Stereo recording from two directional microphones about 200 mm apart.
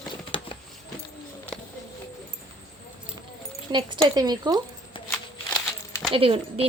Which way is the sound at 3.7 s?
20° right (ahead or behind).